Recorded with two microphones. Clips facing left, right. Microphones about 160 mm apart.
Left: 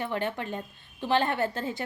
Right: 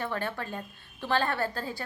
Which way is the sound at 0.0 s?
20° left (ahead or behind).